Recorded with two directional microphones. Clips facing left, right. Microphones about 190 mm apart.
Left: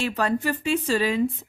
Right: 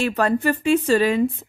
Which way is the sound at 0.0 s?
55° right (ahead or behind).